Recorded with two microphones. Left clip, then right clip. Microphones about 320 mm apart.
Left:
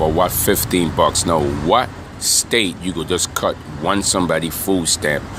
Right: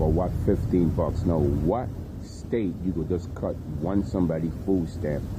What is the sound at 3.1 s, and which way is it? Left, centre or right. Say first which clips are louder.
Speech: left 15 dB; centre.